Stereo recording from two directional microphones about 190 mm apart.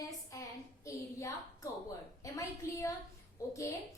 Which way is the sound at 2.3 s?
15° left (ahead or behind).